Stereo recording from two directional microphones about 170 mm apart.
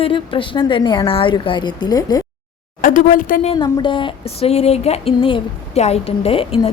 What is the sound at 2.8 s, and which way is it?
Speech, 55° left (ahead or behind).